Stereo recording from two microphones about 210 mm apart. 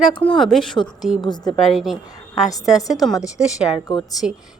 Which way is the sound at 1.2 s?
20° left (ahead or behind).